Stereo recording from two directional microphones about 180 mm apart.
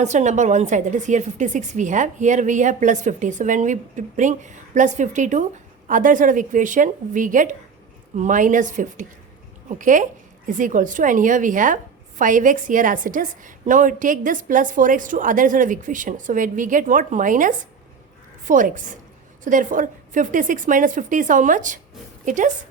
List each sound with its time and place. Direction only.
0.0 s a woman's voice: 40° right (ahead or behind)